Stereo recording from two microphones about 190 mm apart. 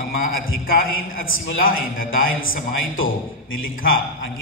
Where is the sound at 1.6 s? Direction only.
50° left (ahead or behind).